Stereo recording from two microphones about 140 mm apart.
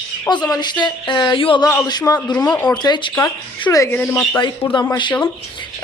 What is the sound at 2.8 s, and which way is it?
A man's voice, 30° left (ahead or behind).